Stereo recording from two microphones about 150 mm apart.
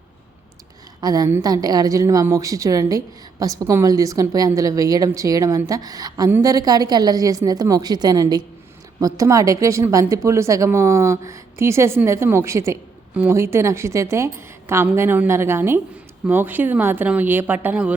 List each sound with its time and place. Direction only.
1.0 s a woman's voice: 25° right (ahead or behind)